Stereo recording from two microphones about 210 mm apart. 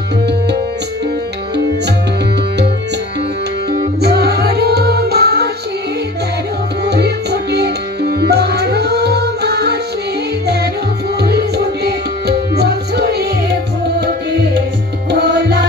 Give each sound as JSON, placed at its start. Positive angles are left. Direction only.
{"t": 4.0, "sound": "music", "side_deg": -50}
{"t": 6.8, "sound": "music", "side_deg": -50}
{"t": 11.1, "sound": "tabla", "side_deg": -50}
{"t": 15.0, "sound": "music", "side_deg": -50}